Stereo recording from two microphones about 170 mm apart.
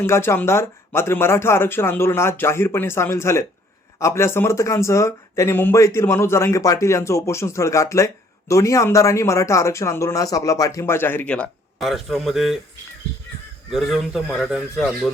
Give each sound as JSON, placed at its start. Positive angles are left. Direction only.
{"t": 0.0, "sound": "speech", "side_deg": 15}
{"t": 13.7, "sound": "a man's voice", "side_deg": 0}